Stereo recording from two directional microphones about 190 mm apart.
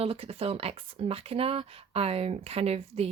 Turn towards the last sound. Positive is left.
turn(degrees=-35)  # may be behind; listen again after turning